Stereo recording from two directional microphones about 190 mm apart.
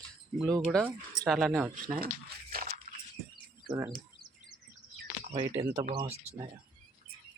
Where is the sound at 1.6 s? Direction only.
20° right (ahead or behind).